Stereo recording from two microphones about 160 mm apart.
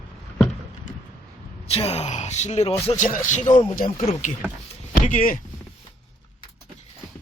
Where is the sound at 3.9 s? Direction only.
45° left (ahead or behind).